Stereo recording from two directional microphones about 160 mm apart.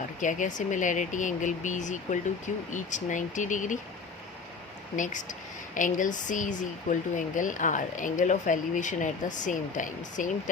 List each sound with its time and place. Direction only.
0.2 s speech: 50° left (ahead or behind)
4.9 s speech: 50° left (ahead or behind)